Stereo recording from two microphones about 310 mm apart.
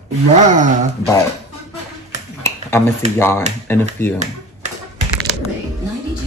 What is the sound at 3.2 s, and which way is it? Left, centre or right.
Speech, centre.